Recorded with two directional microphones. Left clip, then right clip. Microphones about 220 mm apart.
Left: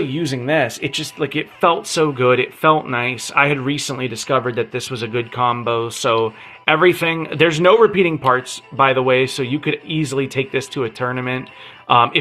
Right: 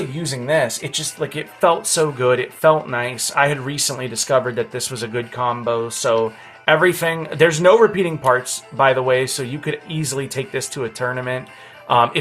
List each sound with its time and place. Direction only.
0.3 s speech: 35° left (ahead or behind)